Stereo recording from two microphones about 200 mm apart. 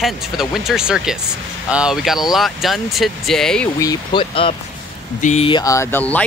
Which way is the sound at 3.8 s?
20° left (ahead or behind).